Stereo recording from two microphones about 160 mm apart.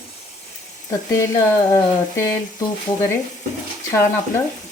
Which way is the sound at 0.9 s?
15° left (ahead or behind).